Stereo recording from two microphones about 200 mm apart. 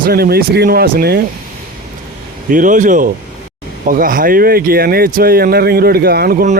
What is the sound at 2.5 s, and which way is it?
Speech, 40° right (ahead or behind).